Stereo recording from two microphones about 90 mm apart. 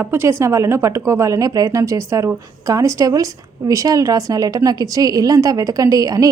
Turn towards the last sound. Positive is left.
turn(degrees=-40)  # may be behind; listen again after turning